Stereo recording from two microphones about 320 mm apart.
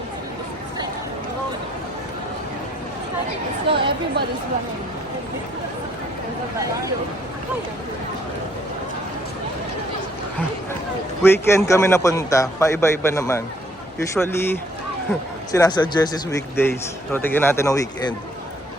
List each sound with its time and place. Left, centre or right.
3.7 s speech: centre
11.2 s speech: centre